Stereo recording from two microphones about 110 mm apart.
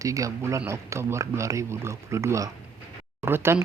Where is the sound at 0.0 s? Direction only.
30° right (ahead or behind).